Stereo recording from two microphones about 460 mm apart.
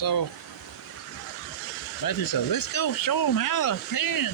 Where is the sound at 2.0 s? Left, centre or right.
Left.